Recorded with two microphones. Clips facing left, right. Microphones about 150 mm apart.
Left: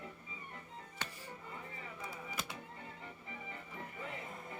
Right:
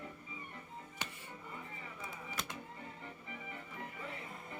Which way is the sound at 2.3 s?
5° left (ahead or behind).